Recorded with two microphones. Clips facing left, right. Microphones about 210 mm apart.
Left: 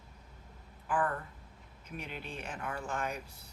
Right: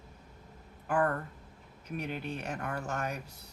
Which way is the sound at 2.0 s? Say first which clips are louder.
Right 7 dB; 65° right (ahead or behind).